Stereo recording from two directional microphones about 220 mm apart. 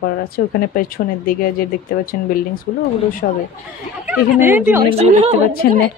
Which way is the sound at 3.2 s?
55° left (ahead or behind).